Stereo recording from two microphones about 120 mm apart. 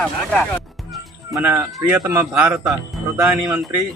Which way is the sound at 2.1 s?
15° right (ahead or behind).